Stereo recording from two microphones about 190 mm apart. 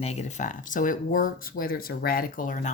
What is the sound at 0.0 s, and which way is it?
A woman's voice, 35° left (ahead or behind).